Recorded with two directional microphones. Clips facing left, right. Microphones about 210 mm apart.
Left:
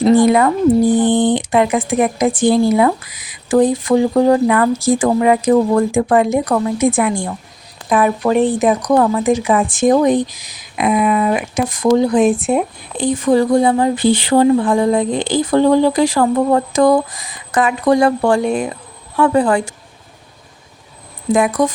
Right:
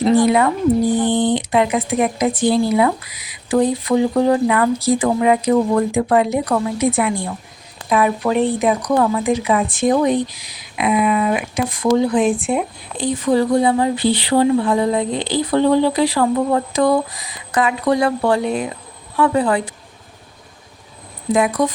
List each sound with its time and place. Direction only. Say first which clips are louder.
1.0 s speech: left 3 dB; 50° left (ahead or behind)
21.6 s speech: left 2 dB; 50° left (ahead or behind)